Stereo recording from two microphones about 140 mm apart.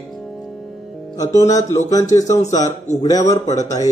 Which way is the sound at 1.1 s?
25° left (ahead or behind).